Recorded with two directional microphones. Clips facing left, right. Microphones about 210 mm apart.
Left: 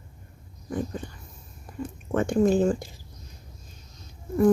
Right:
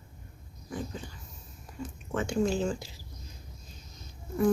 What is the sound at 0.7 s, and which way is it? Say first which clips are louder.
A woman's voice: left 7 dB; 55° left (ahead or behind).